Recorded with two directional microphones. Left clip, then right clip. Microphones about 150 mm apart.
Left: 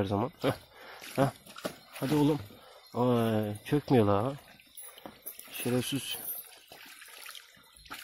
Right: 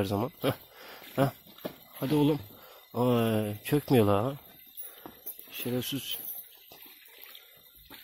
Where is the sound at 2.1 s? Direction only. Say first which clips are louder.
Right 1 dB; 15° right (ahead or behind).